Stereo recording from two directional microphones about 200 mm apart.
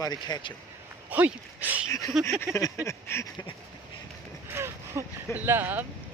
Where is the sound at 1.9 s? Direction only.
15° left (ahead or behind).